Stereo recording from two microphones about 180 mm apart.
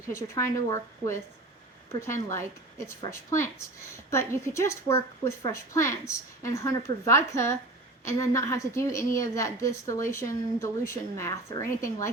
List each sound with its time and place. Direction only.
0.1 s a woman's voice: 15° left (ahead or behind)
2.3 s a woman's voice: 15° left (ahead or behind)